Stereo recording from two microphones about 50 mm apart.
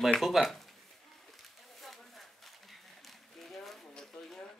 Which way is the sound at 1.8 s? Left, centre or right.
Centre.